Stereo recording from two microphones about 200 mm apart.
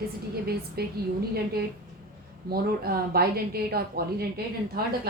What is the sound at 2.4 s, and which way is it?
A woman's voice, 50° right (ahead or behind).